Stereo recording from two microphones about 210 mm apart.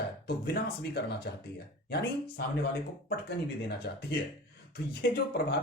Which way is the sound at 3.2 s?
50° left (ahead or behind).